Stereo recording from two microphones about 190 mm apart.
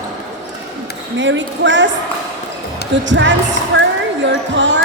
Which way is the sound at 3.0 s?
70° right (ahead or behind).